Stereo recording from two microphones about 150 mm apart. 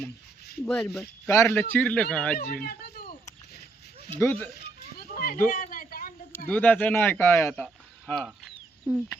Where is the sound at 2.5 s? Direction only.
90° left.